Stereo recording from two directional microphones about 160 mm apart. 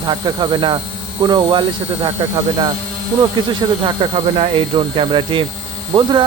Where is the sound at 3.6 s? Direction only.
25° right (ahead or behind).